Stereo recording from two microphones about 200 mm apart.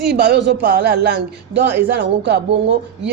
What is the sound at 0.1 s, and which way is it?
Speech, 55° right (ahead or behind).